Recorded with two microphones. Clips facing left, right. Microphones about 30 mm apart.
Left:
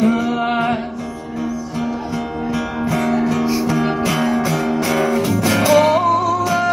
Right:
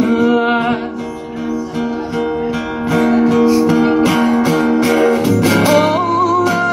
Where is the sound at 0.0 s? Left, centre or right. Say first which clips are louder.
Right 4 dB; centre.